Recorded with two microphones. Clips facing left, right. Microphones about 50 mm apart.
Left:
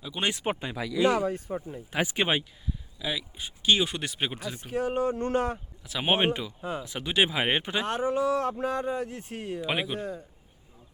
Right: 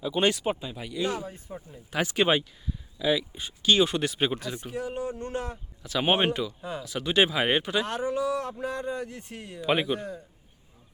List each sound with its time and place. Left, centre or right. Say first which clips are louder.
0.0 s speech: right 6 dB; centre
0.3 s speech: right 1 dB; left
0.6 s speech: left 5 dB; left
1.9 s speech: right 3 dB; centre
3.6 s speech: right 2 dB; centre
3.8 s speech: right 5 dB; centre
4.7 s speech: left 7 dB; left
5.8 s speech: right 1 dB; centre; by 9.6 s left
9.6 s speech: right 5 dB; centre